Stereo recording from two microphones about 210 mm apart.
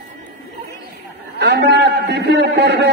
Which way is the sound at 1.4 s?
50° right (ahead or behind).